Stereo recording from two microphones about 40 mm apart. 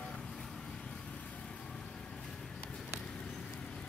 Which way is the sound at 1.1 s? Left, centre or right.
Left.